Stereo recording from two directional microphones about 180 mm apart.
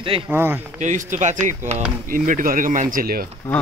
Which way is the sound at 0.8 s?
45° right (ahead or behind).